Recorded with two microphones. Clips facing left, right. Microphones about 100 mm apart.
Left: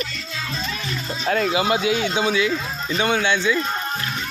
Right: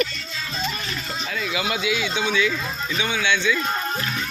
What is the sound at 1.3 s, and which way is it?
Speech, 55° left (ahead or behind).